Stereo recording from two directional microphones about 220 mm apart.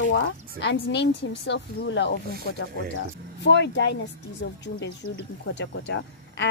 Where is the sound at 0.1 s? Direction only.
55° left (ahead or behind).